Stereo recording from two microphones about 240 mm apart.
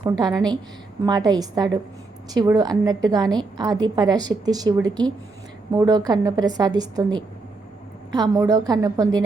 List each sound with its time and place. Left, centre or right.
0.0 s a woman's voice: centre